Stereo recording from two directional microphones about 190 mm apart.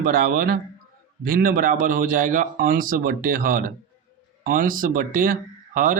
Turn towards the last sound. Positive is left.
turn(degrees=-45)  # may be behind; listen again after turning